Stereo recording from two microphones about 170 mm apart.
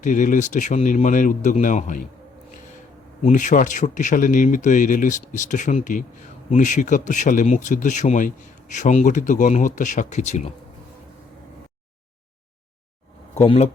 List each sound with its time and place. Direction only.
0.0 s speech: 50° left (ahead or behind)
3.2 s speech: 45° left (ahead or behind)
13.3 s speech: 40° left (ahead or behind)